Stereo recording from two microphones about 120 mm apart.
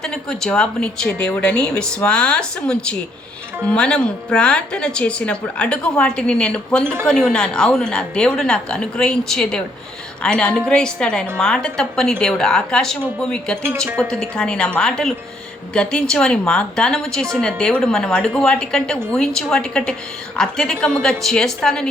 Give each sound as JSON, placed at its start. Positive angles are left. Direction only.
{"t": 0.0, "sound": "a woman's voice", "side_deg": 5}
{"t": 13.8, "sound": "a woman's voice", "side_deg": -20}
{"t": 14.1, "sound": "a woman's voice", "side_deg": 5}